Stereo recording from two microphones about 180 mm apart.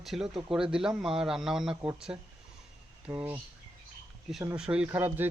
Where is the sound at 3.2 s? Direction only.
10° right (ahead or behind).